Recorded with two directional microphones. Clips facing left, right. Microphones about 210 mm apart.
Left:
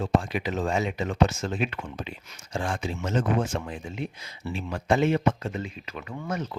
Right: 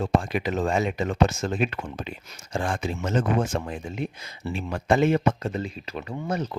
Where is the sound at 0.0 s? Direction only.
50° right (ahead or behind).